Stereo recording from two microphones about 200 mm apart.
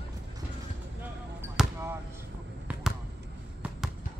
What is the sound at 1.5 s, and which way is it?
Basketball bounce, 10° right (ahead or behind).